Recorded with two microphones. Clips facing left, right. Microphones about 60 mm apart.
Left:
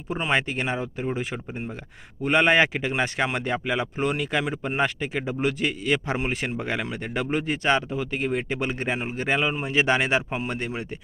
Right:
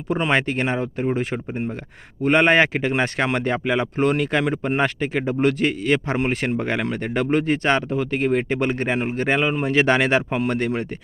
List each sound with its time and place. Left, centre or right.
0.1 s speech: right